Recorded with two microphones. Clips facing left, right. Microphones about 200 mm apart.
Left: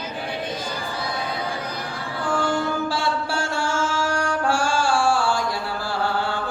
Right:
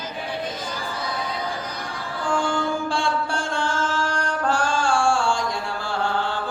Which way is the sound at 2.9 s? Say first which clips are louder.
Even; 5° left (ahead or behind).